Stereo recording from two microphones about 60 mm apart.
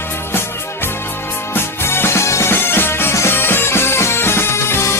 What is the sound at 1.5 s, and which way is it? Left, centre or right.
Music, left.